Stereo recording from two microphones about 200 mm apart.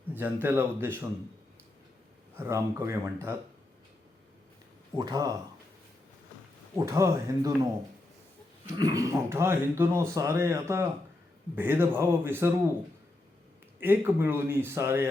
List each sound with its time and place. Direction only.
0.1 s speech: 10° right (ahead or behind)
2.3 s speech: 10° right (ahead or behind)
4.9 s speech: 20° right (ahead or behind)
6.7 s speech: 15° right (ahead or behind)
13.7 s speech: 10° right (ahead or behind)